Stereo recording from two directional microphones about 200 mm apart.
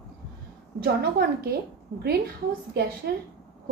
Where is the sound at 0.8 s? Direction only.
50° right (ahead or behind).